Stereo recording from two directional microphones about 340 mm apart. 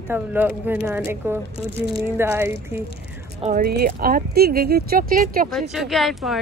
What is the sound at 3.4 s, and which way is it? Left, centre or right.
Speech, right.